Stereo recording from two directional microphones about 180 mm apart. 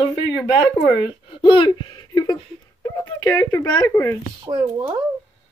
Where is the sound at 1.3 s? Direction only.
30° left (ahead or behind).